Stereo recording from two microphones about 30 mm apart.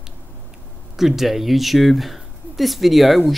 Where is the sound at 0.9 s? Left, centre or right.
Centre.